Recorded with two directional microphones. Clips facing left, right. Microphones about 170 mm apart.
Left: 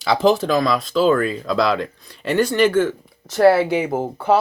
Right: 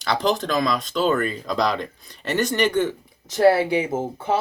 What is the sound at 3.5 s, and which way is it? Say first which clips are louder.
Speech: left 3 dB; 60° left (ahead or behind).